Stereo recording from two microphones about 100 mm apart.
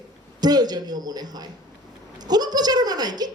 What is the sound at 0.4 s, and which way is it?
A woman's voice, 40° right (ahead or behind).